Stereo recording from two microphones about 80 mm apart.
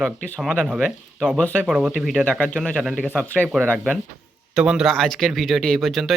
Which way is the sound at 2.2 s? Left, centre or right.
Centre.